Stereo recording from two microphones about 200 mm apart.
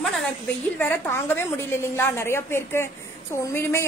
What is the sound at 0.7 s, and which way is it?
Speech, 10° left (ahead or behind).